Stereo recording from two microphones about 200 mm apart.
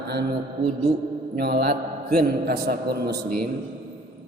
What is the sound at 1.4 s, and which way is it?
Mantra, 55° right (ahead or behind).